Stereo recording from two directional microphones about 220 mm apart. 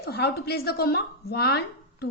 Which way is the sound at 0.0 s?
45° left (ahead or behind).